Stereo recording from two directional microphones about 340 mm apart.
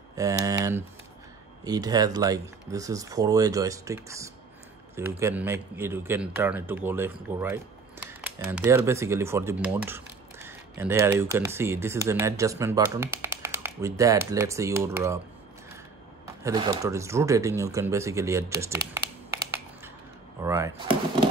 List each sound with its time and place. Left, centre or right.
0.1 s speech: centre
16.4 s speech: centre
18.9 s computer keyboard: centre
20.4 s speech: centre